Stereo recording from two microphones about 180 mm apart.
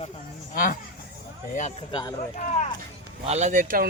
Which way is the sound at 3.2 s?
40° right (ahead or behind).